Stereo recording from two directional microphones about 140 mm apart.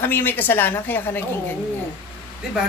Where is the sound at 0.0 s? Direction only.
15° left (ahead or behind).